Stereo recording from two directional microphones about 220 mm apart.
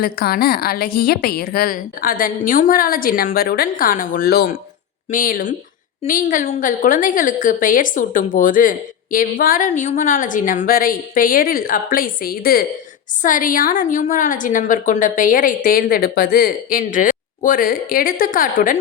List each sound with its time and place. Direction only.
0.0 s a woman's voice: 45° left (ahead or behind)